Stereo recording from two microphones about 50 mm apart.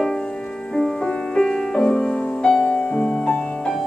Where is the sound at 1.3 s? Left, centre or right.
Centre.